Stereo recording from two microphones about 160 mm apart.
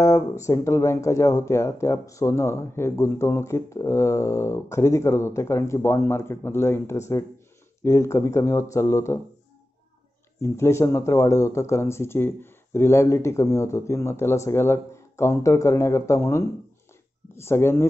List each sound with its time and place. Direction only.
0.0 s speech: 20° left (ahead or behind)
10.4 s speech: 15° left (ahead or behind)